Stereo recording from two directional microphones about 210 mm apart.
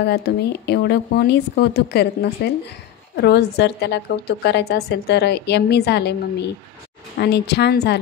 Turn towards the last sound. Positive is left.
turn(degrees=50)  # may be behind; listen again after turning